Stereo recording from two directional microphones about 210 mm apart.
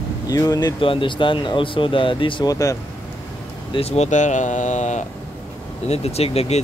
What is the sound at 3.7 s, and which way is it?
Speech, 30° left (ahead or behind).